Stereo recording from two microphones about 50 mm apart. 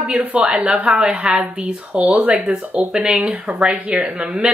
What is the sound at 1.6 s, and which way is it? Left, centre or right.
Speech, right.